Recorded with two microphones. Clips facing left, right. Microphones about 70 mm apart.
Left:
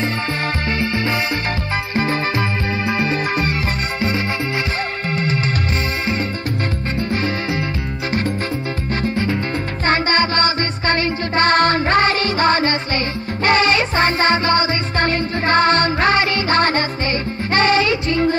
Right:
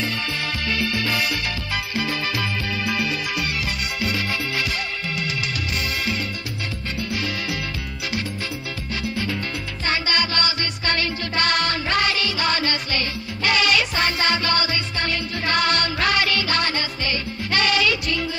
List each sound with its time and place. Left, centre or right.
0.7 s music: left
5.1 s music: left
7.0 s music: left
9.0 s music: left